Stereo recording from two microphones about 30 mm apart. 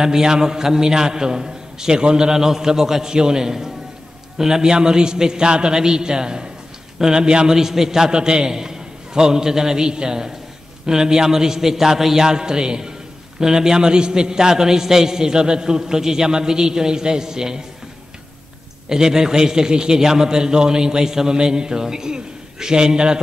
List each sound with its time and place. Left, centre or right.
0.0 s a man's voice: right
7.5 s a man's voice: centre
8.1 s a man's voice: right
18.9 s a man's voice: right